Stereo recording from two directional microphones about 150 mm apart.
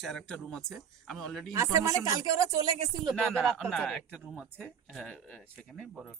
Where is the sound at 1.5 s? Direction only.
20° right (ahead or behind).